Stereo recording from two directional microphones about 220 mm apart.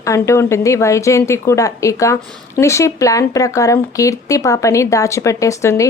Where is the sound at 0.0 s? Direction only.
15° left (ahead or behind).